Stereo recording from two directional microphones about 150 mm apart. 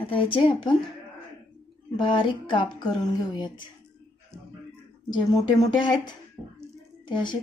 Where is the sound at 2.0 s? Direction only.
35° left (ahead or behind).